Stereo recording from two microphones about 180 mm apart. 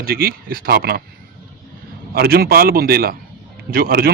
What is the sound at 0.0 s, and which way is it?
Speech, 55° right (ahead or behind).